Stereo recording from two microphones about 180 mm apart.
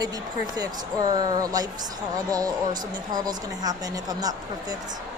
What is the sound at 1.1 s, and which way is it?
Speech, 20° right (ahead or behind).